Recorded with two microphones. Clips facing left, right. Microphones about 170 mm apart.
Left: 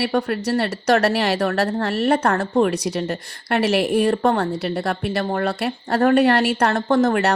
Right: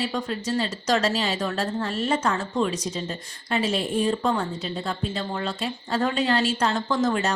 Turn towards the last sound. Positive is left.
turn(degrees=60)  # may be behind; listen again after turning